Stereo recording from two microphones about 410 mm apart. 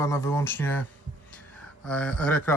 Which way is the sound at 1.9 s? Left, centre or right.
Centre.